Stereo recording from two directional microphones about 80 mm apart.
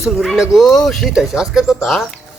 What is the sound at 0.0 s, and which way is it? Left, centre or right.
Speech, centre.